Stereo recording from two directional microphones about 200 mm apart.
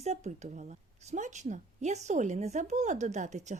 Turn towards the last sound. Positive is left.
turn(degrees=-35)  # may be behind; listen again after turning